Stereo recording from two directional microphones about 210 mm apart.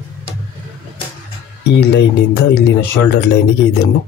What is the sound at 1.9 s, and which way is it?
Speech, 55° left (ahead or behind).